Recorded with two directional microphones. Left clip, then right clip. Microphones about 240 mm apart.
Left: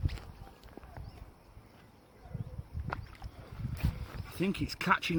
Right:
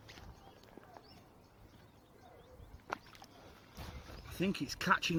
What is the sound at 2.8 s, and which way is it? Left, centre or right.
Rowboat, centre.